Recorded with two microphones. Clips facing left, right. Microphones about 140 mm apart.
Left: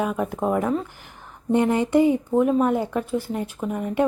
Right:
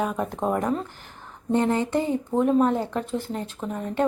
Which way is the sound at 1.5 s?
15° left (ahead or behind).